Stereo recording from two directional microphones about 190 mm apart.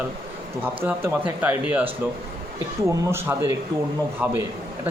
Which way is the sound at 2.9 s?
15° right (ahead or behind).